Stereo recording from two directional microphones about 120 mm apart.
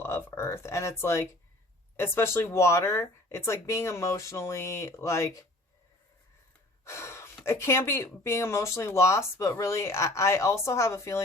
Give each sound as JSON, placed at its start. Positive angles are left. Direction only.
{"t": 0.0, "sound": "speech", "side_deg": 20}
{"t": 6.8, "sound": "gasp", "side_deg": 20}
{"t": 7.4, "sound": "speech", "side_deg": 20}